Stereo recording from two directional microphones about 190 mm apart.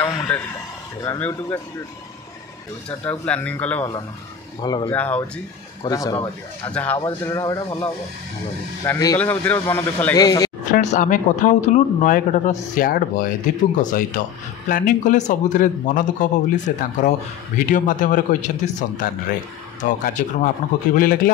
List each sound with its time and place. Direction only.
0.0 s a sound: 15° left (ahead or behind)
1.0 s a man's voice: 10° left (ahead or behind)
3.1 s a man's voice: 10° left (ahead or behind)
4.6 s speech: 25° left (ahead or behind)
4.8 s a man's voice: 10° left (ahead or behind)
5.9 s speech: 20° left (ahead or behind)
6.7 s a man's voice: 10° left (ahead or behind)
10.6 s a man's voice: 40° left (ahead or behind)
14.7 s a man's voice: 45° left (ahead or behind)